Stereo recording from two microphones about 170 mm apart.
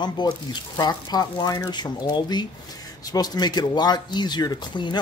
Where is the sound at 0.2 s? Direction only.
25° left (ahead or behind).